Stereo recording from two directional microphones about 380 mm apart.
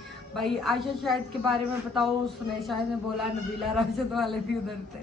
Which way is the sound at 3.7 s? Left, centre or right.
Centre.